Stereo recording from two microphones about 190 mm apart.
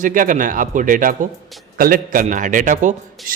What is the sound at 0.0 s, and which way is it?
A man's voice, 45° right (ahead or behind).